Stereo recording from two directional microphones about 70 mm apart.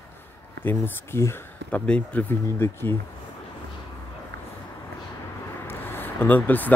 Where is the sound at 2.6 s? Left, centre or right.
Left.